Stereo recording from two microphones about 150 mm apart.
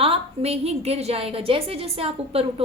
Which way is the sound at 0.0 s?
40° right (ahead or behind).